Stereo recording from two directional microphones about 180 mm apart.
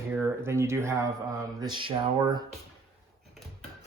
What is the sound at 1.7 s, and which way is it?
Speech, 25° right (ahead or behind).